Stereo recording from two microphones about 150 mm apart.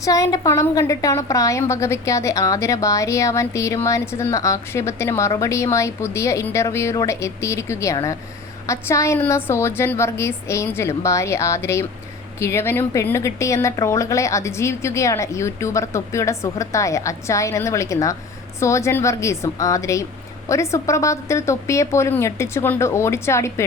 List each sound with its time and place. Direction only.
0.0 s a woman's voice: 20° left (ahead or behind)